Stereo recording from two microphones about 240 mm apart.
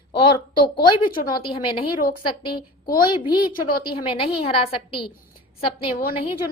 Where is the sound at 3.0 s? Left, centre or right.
Centre.